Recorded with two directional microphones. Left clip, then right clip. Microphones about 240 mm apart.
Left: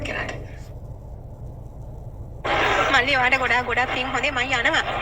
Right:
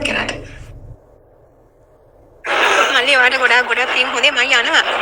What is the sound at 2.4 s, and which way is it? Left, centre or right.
Speech, right.